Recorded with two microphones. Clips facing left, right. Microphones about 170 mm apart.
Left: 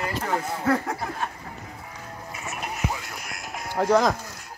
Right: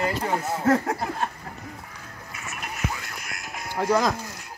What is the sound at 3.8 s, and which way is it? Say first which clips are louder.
Speech: left 2 dB; 5° right (ahead or behind).